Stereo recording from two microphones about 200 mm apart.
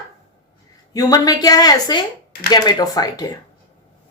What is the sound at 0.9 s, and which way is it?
A woman's voice, 20° left (ahead or behind).